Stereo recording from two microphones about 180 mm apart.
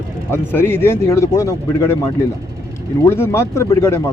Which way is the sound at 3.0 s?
15° left (ahead or behind).